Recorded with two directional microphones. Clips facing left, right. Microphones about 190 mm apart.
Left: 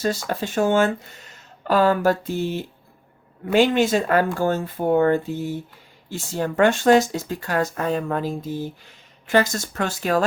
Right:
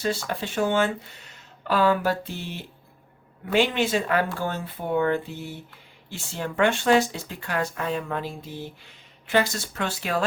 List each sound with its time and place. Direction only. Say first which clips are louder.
0.0 s speech: left 3 dB; 40° left (ahead or behind)